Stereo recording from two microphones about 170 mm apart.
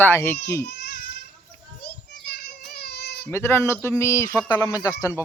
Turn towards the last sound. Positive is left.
turn(degrees=20)  # may be behind; listen again after turning